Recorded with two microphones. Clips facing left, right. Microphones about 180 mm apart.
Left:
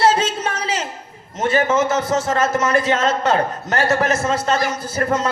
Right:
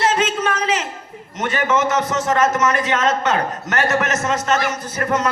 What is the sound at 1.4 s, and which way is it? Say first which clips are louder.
A man's voice: left 2 dB; 30° left (ahead or behind).